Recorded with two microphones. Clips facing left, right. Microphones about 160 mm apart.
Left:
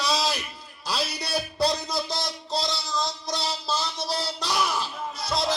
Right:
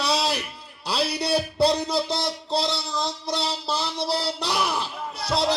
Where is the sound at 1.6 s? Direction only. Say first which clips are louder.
Right 3 dB; 30° right (ahead or behind).